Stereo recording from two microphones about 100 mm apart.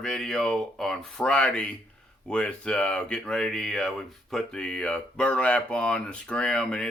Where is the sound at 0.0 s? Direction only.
5° left (ahead or behind).